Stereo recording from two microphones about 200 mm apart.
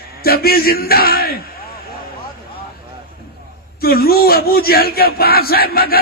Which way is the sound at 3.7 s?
50° left (ahead or behind).